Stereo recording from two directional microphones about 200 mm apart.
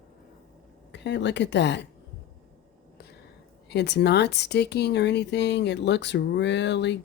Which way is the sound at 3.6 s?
55° left (ahead or behind).